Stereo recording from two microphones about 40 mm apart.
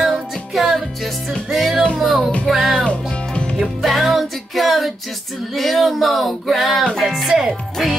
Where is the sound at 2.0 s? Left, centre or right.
Centre.